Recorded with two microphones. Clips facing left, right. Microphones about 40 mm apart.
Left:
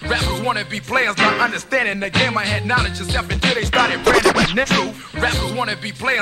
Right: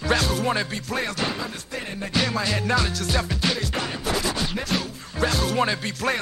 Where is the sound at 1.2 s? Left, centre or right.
Left.